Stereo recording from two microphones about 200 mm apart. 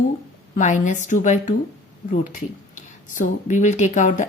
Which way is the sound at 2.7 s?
40° left (ahead or behind).